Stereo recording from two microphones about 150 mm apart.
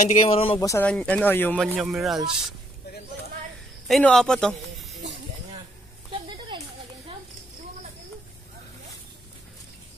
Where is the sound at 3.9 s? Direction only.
5° left (ahead or behind).